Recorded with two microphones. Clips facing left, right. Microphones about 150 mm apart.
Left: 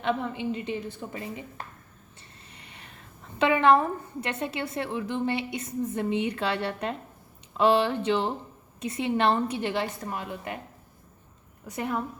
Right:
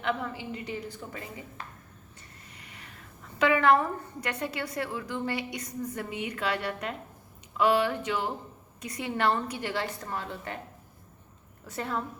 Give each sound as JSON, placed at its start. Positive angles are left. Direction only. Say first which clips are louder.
{"t": 0.0, "sound": "a woman's voice", "louder": "left 4 dB", "side_deg": 25}
{"t": 2.5, "sound": "a sound", "louder": "left 1 dB", "side_deg": 30}
{"t": 3.3, "sound": "a woman's voice", "louder": "left 2 dB", "side_deg": 25}
{"t": 11.6, "sound": "a woman's voice", "louder": "left 3 dB", "side_deg": 15}